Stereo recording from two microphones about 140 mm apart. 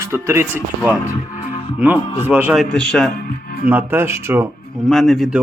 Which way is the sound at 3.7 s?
15° right (ahead or behind).